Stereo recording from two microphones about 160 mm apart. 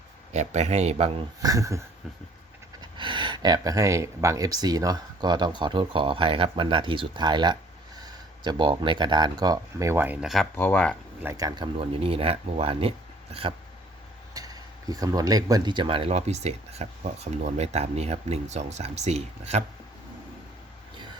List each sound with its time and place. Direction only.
0.3 s speech: 45° right (ahead or behind)
1.4 s speech: 20° right (ahead or behind)
2.8 s speech: 30° right (ahead or behind); by 10.4 s 5° right (ahead or behind)
10.5 s speech: 10° left (ahead or behind)
11.2 s speech: 20° right (ahead or behind); by 19.6 s 45° right (ahead or behind)